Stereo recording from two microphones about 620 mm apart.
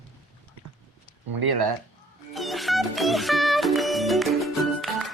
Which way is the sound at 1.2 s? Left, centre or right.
Right.